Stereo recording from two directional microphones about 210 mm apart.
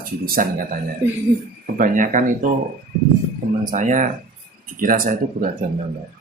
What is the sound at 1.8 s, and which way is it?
Speech, 40° right (ahead or behind).